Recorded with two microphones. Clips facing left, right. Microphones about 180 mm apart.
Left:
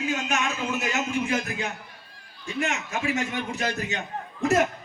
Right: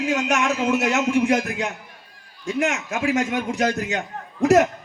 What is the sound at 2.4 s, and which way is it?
A man's voice, 90° right.